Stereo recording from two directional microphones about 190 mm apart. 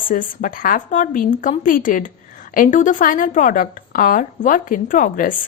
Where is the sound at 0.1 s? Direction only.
45° left (ahead or behind).